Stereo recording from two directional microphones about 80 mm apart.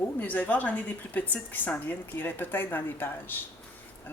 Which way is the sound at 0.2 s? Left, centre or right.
Left.